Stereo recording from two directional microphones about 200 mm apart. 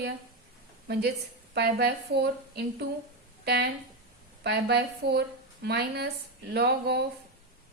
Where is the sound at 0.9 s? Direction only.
55° right (ahead or behind).